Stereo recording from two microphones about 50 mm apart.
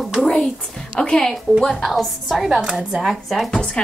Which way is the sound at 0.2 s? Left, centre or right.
Left.